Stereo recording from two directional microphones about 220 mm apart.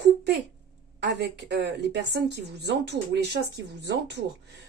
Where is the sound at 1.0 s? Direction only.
50° right (ahead or behind).